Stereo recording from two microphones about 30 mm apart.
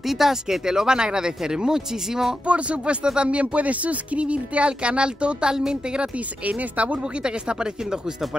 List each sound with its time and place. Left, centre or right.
0.0 s speech: centre
2.4 s speech: right
6.1 s speech: right
7.0 s speech: right